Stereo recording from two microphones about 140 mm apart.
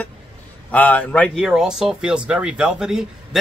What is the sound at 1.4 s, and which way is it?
Speech, 5° right (ahead or behind).